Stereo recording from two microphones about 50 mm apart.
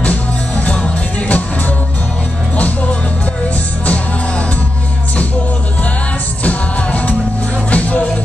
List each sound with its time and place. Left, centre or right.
0.0 s music: left
2.5 s music: left
6.4 s music: left